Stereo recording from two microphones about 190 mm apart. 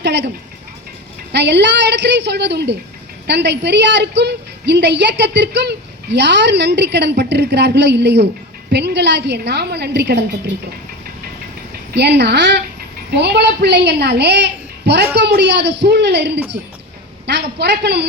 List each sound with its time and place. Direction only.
0.0 s speech: 65° right (ahead or behind)
1.3 s a woman's voice: 60° right (ahead or behind)
11.9 s a woman's voice: 65° right (ahead or behind)